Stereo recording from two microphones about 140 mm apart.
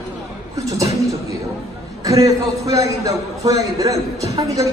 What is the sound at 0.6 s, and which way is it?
Speech, 25° right (ahead or behind).